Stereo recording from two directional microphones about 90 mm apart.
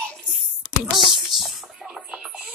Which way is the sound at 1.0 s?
Centre (ahead or behind).